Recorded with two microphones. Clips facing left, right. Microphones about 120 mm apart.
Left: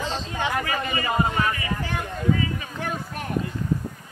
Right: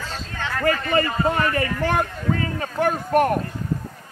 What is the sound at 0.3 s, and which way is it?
Speech, 15° left (ahead or behind).